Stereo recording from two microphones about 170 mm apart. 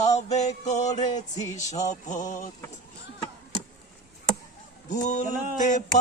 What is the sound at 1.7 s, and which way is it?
Music, 45° left (ahead or behind).